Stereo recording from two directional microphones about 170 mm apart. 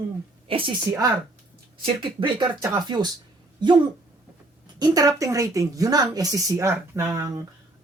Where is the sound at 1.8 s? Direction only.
30° right (ahead or behind).